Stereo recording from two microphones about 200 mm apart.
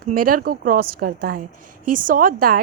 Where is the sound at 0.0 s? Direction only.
45° right (ahead or behind).